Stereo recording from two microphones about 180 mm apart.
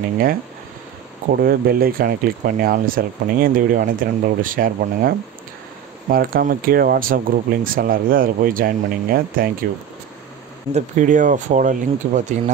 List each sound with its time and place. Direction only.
1.3 s speech: 55° right (ahead or behind)
10.7 s speech: 45° right (ahead or behind)